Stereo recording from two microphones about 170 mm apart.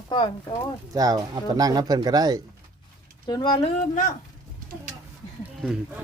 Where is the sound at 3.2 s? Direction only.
25° left (ahead or behind).